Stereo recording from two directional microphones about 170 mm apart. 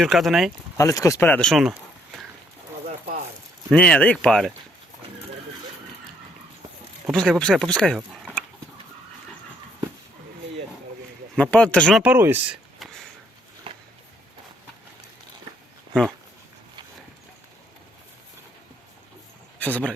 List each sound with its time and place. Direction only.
0.0 s speech: centre (ahead or behind)
0.8 s speech: 20° left (ahead or behind)
1.5 s speech: centre (ahead or behind)
3.7 s speech: 5° left (ahead or behind)
7.1 s speech: 5° left (ahead or behind)
11.3 s speech: 5° left (ahead or behind)
12.0 s speech: 15° right (ahead or behind)
12.8 s a sound: centre (ahead or behind)
13.7 s a sound: 30° right (ahead or behind)
19.5 s speech: 10° left (ahead or behind)